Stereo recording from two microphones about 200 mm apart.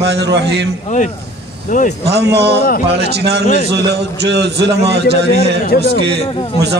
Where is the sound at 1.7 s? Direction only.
40° left (ahead or behind).